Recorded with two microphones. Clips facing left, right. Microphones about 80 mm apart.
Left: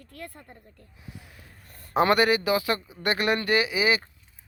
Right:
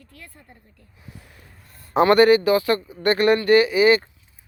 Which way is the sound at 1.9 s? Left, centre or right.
Centre.